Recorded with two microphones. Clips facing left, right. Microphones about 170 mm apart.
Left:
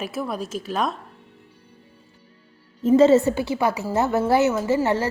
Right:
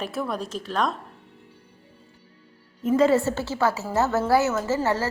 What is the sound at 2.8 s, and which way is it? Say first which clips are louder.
A woman's voice: left 5 dB; 25° left (ahead or behind).